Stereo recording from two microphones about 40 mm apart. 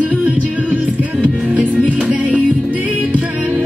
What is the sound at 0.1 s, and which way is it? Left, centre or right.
Music, right.